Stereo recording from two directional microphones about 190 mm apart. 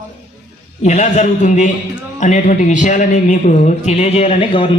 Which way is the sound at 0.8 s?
35° left (ahead or behind).